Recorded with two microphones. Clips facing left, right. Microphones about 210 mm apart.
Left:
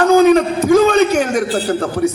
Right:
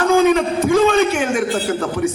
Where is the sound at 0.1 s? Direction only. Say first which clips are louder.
Left 3 dB; 40° left (ahead or behind).